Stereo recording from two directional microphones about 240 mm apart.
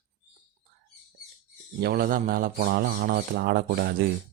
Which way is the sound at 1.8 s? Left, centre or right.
Right.